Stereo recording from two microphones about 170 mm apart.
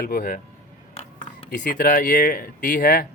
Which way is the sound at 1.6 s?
55° left (ahead or behind).